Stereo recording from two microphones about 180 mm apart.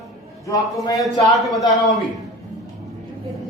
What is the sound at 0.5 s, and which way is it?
Speech, 20° left (ahead or behind).